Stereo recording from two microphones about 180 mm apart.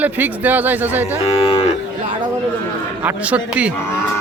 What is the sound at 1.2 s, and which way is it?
Speech, 35° left (ahead or behind).